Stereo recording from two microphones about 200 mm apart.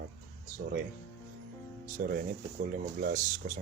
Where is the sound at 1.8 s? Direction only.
45° right (ahead or behind).